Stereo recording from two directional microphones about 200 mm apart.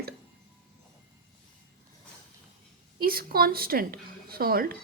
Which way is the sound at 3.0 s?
50° right (ahead or behind).